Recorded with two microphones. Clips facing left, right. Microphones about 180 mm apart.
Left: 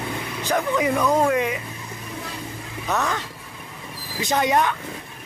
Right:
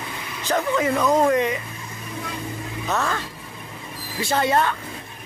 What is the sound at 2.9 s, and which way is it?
Speech, 15° left (ahead or behind).